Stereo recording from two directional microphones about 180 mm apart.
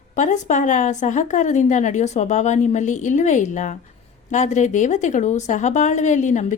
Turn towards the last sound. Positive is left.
turn(degrees=40)  # may be behind; listen again after turning